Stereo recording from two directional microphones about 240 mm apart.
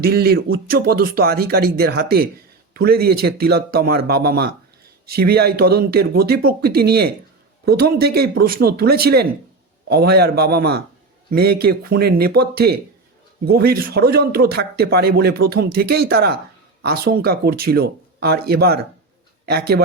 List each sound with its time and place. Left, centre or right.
0.0 s speech: right